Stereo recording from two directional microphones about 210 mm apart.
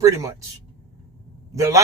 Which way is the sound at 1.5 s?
15° right (ahead or behind).